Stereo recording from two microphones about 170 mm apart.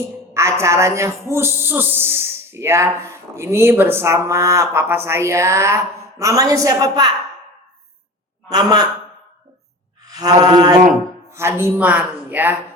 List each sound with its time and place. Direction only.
0.3 s a man's voice: 15° right (ahead or behind)
8.4 s a man's voice: 25° right (ahead or behind)
10.1 s mantra: 25° right (ahead or behind)
11.3 s a man's voice: 15° right (ahead or behind)